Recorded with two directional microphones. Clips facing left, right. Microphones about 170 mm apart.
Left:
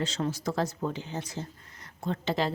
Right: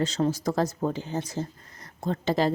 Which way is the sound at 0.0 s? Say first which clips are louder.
Right 5 dB; 40° right (ahead or behind).